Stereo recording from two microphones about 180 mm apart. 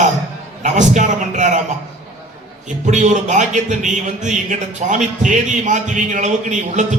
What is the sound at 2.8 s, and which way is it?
Speech, 40° right (ahead or behind).